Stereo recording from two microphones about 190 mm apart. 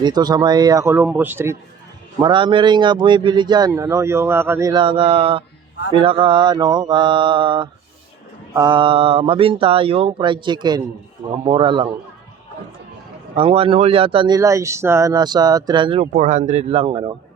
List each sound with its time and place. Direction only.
0.0 s speech: 20° right (ahead or behind)
2.2 s speech: 25° right (ahead or behind)
13.3 s speech: 30° right (ahead or behind)
16.1 s speech: 40° right (ahead or behind)